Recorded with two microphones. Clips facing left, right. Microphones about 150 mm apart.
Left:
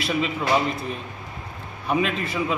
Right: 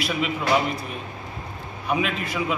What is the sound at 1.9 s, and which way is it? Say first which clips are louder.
Speech: left 1 dB; 5° right (ahead or behind).